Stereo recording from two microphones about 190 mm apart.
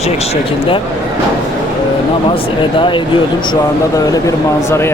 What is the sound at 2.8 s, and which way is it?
Speech, 25° left (ahead or behind).